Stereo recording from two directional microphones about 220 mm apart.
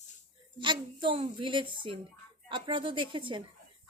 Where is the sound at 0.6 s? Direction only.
20° right (ahead or behind).